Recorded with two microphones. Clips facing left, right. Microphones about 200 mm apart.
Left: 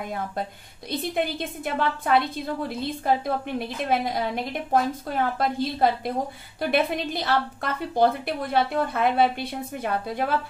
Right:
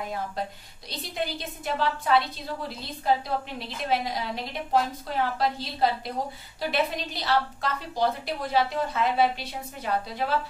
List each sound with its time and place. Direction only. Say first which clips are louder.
0.8 s a woman's voice: left 6 dB; 55° left (ahead or behind)